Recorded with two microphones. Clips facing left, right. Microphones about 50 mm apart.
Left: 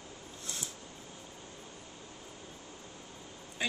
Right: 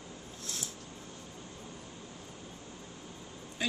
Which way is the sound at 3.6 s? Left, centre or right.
Centre.